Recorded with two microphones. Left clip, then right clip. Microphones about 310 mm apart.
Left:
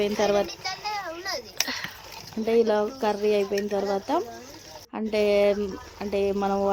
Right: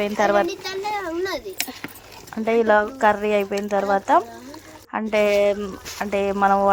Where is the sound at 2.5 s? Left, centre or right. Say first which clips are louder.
Right 5 dB; centre.